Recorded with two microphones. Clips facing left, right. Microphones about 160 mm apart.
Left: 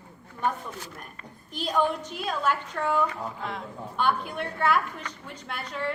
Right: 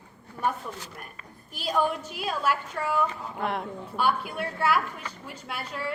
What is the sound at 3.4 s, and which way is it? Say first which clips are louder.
Speech: right 10 dB; 65° right (ahead or behind).